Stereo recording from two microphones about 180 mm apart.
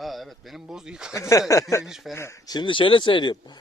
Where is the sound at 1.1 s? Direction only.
15° left (ahead or behind).